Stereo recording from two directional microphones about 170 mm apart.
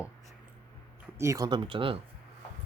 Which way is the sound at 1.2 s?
20° right (ahead or behind).